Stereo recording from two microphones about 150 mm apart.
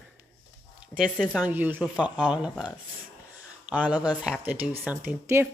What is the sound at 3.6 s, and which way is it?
Speech, 10° right (ahead or behind).